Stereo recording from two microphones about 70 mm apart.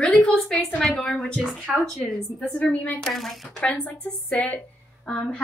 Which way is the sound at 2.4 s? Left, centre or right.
Centre.